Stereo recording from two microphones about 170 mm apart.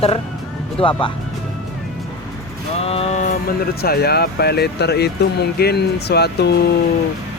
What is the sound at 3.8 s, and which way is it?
Speech, 65° left (ahead or behind).